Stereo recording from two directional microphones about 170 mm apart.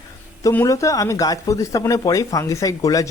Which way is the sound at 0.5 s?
20° left (ahead or behind).